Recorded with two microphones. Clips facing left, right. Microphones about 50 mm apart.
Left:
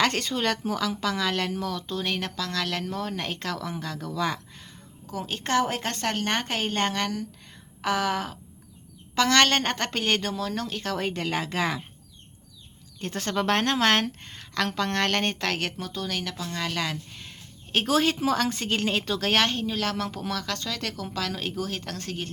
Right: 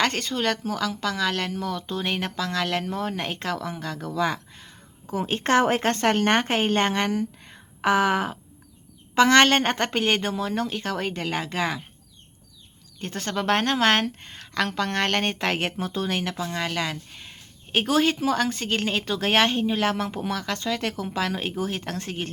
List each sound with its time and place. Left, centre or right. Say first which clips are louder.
0.0 s a woman's voice: right 1 dB; centre
5.1 s a woman's voice: right 4 dB; right; by 11.8 s centre
13.0 s a woman's voice: left 1 dB; centre; by 22.3 s right